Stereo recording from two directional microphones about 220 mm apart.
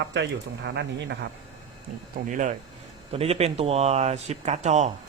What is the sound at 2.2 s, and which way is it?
Speech, 35° right (ahead or behind).